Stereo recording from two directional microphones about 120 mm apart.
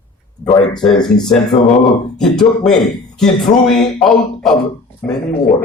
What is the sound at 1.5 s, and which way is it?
Speech, 50° left (ahead or behind).